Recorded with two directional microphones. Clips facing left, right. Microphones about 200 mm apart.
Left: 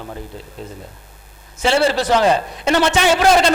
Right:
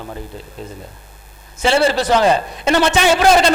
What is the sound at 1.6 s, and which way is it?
A man's voice, 15° right (ahead or behind).